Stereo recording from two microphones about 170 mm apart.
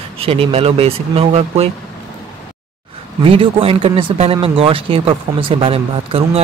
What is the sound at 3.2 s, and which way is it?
Speech, 30° right (ahead or behind).